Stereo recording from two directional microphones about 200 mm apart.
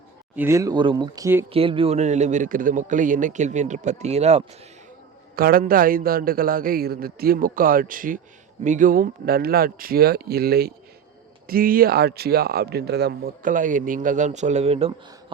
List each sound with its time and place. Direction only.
0.3 s speech: 15° right (ahead or behind)
1.5 s a man's voice: 25° right (ahead or behind)
5.4 s speech: 45° right (ahead or behind); by 14.9 s 30° right (ahead or behind)